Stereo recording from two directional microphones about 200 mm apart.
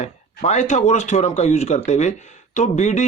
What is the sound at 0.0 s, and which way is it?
Speech, 35° left (ahead or behind).